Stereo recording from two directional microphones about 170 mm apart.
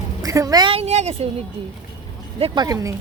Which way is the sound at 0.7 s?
40° right (ahead or behind).